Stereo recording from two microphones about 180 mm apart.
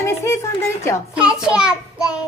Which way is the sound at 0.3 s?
15° left (ahead or behind).